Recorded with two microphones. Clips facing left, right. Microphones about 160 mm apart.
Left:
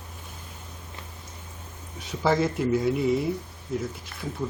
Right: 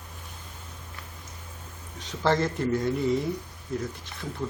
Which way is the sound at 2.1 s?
5° left (ahead or behind).